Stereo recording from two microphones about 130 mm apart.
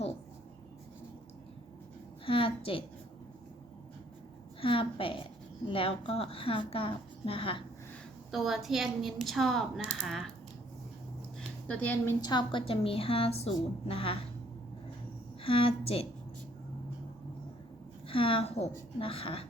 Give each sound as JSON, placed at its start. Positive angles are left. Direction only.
{"t": 2.2, "sound": "a woman's voice", "side_deg": 45}
{"t": 4.6, "sound": "a woman's voice", "side_deg": 45}
{"t": 8.3, "sound": "a woman's voice", "side_deg": 0}
{"t": 11.3, "sound": "a sound", "side_deg": 10}
{"t": 12.2, "sound": "a woman's voice", "side_deg": 35}
{"t": 15.4, "sound": "a woman's voice", "side_deg": 45}
{"t": 18.1, "sound": "a woman's voice", "side_deg": 45}